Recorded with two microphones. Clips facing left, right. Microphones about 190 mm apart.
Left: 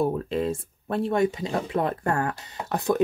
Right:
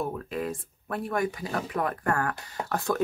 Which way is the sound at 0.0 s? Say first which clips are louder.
Left 6 dB; 30° left (ahead or behind).